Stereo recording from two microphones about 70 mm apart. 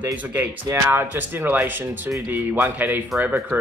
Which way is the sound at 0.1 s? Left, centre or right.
Right.